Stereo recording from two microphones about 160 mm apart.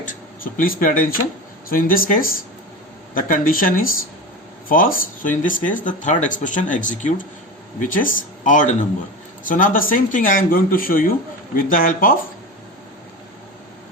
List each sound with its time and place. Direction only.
0.1 s speech: 60° left (ahead or behind)